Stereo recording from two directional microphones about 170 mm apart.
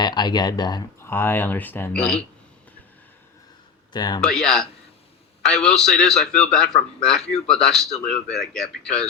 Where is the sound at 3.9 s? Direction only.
25° left (ahead or behind).